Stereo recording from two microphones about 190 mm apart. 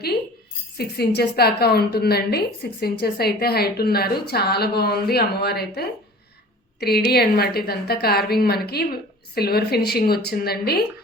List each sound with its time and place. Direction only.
0.8 s a woman's voice: 55° left (ahead or behind)